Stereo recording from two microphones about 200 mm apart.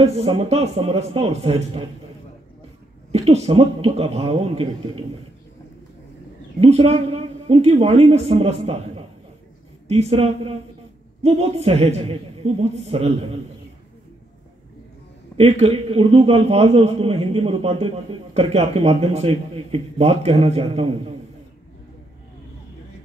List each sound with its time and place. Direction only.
0.0 s a man's voice: 30° right (ahead or behind)
3.1 s a man's voice: 30° right (ahead or behind)
6.6 s a man's voice: 30° right (ahead or behind)
15.3 s a man's voice: 30° right (ahead or behind)